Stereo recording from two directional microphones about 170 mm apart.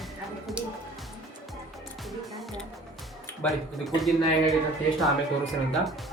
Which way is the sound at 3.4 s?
Centre (ahead or behind).